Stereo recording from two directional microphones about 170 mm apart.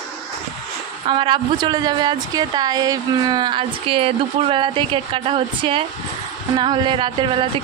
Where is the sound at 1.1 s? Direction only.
30° right (ahead or behind).